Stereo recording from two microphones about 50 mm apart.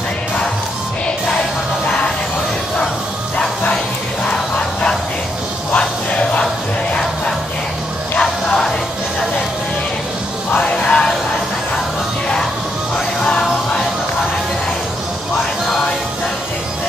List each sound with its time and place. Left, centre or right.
1.9 s music: centre
5.7 s music: left
8.2 s music: centre
10.7 s music: left